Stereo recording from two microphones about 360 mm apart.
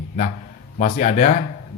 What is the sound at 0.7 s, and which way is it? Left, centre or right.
Speech, left.